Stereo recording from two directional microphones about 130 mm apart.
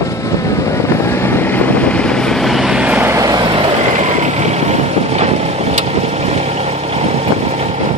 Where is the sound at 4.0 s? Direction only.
65° right (ahead or behind).